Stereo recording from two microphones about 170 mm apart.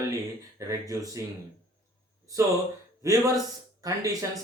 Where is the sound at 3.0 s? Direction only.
20° right (ahead or behind).